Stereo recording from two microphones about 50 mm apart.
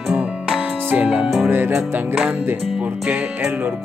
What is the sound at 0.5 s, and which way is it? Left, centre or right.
Music, right.